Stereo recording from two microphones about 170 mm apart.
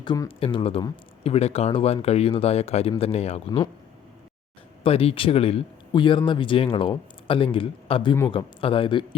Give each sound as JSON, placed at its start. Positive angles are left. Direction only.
{"t": 0.0, "sound": "speech", "side_deg": 25}
{"t": 4.8, "sound": "speech", "side_deg": 35}